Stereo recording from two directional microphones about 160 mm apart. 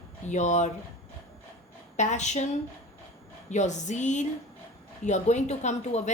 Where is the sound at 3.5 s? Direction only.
45° left (ahead or behind).